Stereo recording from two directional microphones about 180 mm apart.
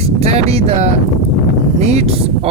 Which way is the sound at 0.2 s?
35° right (ahead or behind).